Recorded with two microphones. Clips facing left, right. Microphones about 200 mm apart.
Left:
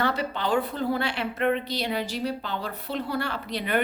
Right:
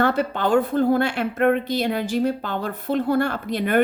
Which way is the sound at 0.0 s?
50° right (ahead or behind).